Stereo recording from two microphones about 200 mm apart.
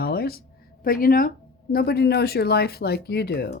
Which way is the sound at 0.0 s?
50° left (ahead or behind).